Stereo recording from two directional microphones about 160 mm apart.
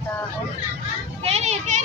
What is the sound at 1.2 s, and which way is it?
Speech, 40° right (ahead or behind).